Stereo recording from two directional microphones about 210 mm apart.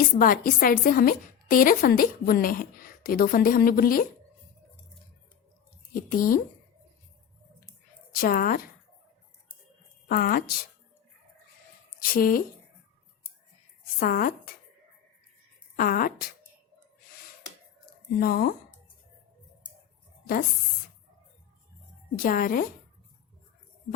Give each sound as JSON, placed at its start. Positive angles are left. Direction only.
{"t": 0.0, "sound": "a woman's voice", "side_deg": 45}
{"t": 5.9, "sound": "speech", "side_deg": 40}
{"t": 8.1, "sound": "a woman's voice", "side_deg": 45}
{"t": 10.1, "sound": "a woman's voice", "side_deg": 40}
{"t": 12.1, "sound": "a woman's voice", "side_deg": 45}
{"t": 14.0, "sound": "a woman's voice", "side_deg": 40}
{"t": 15.7, "sound": "a woman's voice", "side_deg": 40}
{"t": 18.2, "sound": "a woman's voice", "side_deg": 45}
{"t": 22.1, "sound": "a woman's voice", "side_deg": 40}